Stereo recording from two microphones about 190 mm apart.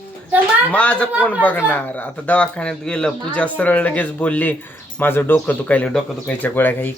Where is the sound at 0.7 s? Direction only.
5° left (ahead or behind).